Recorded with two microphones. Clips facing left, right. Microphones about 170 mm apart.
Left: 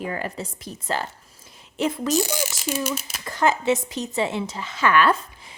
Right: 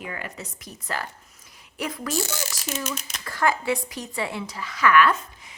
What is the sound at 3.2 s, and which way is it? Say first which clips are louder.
A woman's voice: left 3 dB; 20° left (ahead or behind).